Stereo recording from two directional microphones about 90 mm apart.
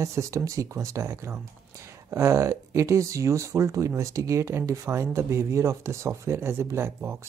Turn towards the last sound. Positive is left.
turn(degrees=-30)  # may be behind; listen again after turning